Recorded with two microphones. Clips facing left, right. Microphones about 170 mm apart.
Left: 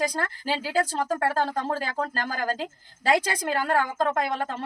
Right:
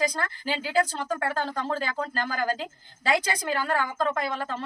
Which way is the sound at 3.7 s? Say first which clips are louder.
Left 3 dB; 50° left (ahead or behind).